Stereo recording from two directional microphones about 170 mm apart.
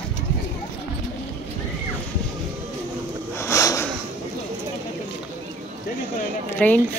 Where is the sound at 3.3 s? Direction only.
15° left (ahead or behind).